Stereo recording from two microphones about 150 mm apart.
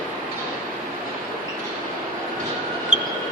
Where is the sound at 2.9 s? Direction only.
55° right (ahead or behind).